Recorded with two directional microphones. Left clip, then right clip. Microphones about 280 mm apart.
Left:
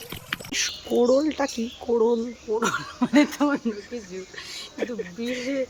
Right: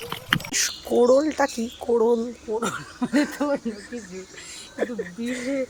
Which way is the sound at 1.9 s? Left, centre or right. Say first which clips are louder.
Right 1 dB; centre.